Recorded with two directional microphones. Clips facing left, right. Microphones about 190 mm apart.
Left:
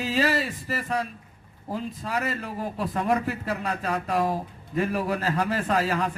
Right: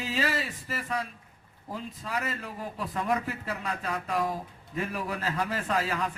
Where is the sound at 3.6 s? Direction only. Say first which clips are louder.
Left 5 dB; 60° left (ahead or behind).